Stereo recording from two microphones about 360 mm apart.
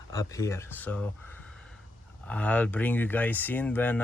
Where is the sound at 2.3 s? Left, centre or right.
Centre.